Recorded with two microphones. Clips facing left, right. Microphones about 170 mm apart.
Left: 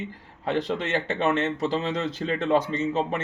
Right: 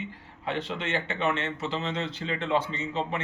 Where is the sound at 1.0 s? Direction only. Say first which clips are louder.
Left 5 dB; 40° left (ahead or behind).